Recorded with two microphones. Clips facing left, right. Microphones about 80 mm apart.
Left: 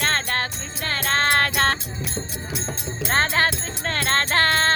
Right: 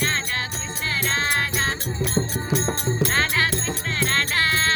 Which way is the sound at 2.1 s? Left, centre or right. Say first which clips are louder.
Right 9 dB; right.